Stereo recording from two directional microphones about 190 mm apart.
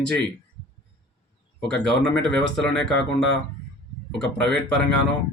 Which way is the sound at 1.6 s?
5° left (ahead or behind).